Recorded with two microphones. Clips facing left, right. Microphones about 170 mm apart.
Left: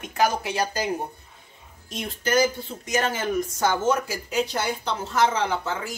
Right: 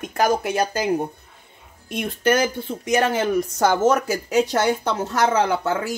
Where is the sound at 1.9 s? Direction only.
60° right (ahead or behind).